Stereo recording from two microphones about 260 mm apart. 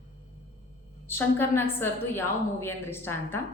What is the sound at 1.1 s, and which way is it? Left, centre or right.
A woman's voice, centre.